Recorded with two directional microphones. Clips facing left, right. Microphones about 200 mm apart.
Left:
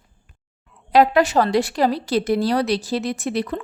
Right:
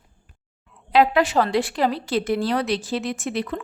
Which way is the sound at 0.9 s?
40° left (ahead or behind).